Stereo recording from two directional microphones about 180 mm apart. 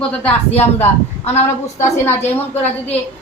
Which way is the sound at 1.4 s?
15° left (ahead or behind).